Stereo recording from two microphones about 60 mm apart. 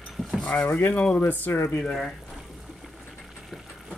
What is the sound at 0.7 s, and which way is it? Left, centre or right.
Speech, left.